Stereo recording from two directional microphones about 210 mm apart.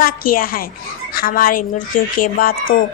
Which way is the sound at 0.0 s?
45° left (ahead or behind).